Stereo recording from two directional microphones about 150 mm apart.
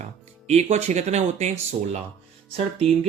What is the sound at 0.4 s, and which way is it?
Speech, 45° right (ahead or behind).